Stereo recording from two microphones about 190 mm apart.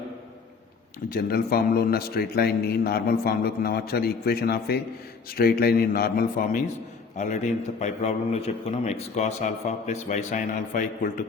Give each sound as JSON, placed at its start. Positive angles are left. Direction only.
{"t": 1.1, "sound": "a man's voice", "side_deg": 55}
{"t": 7.2, "sound": "a man's voice", "side_deg": 40}